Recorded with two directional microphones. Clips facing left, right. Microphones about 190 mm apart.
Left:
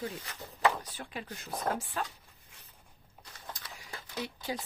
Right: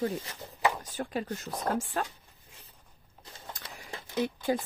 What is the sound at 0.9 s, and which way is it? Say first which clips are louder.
Speech: right 9 dB; 45° right (ahead or behind).